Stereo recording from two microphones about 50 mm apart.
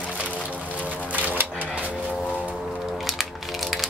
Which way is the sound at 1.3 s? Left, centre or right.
Right.